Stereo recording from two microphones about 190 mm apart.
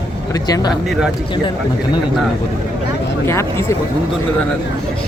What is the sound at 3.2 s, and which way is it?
Speech, 15° left (ahead or behind).